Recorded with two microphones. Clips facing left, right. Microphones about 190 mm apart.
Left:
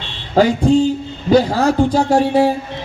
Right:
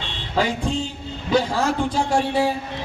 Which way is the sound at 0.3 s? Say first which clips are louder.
Left 10 dB; 40° left (ahead or behind).